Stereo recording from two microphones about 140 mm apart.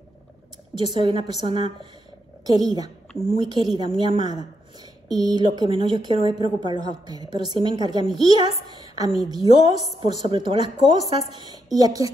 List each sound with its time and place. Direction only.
1.0 s a woman's voice: 40° right (ahead or behind)
3.1 s a woman's voice: 25° left (ahead or behind)
3.5 s a woman's voice: 30° right (ahead or behind)